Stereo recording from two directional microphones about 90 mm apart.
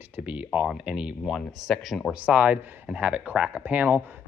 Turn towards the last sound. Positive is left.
turn(degrees=-15)  # may be behind; listen again after turning